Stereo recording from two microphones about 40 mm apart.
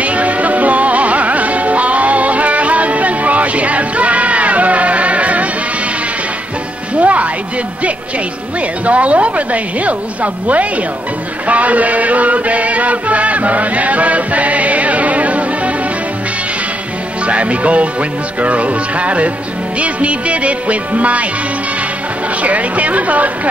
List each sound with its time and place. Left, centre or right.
0.0 s music: right
7.0 s music: right
8.5 s a woman's voice: right
11.4 s chant: right
17.3 s a woman's voice: right
22.4 s a woman's voice: right